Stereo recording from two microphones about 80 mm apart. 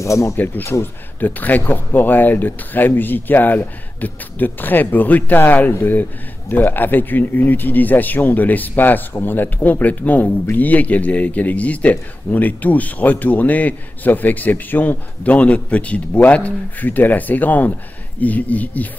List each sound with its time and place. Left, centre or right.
0.0 s speech: left
1.2 s a man's voice: left